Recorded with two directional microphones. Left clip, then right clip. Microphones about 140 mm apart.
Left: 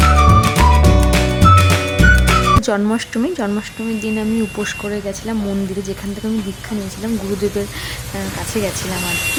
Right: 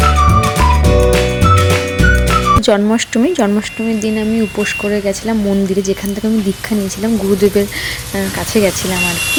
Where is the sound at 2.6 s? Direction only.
25° right (ahead or behind).